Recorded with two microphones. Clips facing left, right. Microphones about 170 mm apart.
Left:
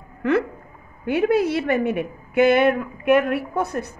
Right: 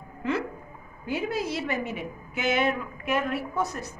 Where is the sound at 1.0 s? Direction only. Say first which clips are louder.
Left 10 dB; 60° left (ahead or behind).